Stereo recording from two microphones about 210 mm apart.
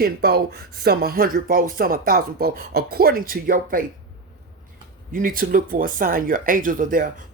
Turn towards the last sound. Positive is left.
turn(degrees=-40)  # may be behind; listen again after turning